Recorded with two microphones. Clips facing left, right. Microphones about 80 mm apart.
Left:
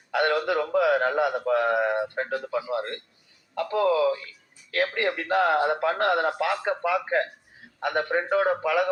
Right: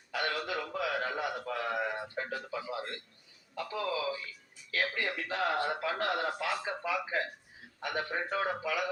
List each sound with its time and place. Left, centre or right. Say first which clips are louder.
0.1 s a man's voice: left 11 dB; left